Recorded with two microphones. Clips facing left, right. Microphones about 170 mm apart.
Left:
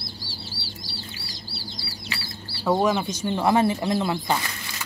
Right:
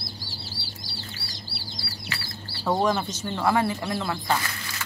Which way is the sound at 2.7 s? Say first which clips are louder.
Left 2 dB; 5° left (ahead or behind).